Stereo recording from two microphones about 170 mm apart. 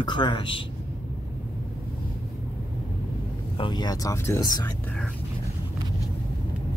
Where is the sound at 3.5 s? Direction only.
25° left (ahead or behind).